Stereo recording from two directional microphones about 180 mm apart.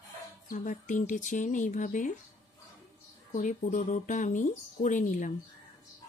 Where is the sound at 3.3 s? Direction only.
45° left (ahead or behind).